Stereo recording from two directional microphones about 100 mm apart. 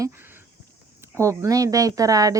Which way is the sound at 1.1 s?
30° right (ahead or behind).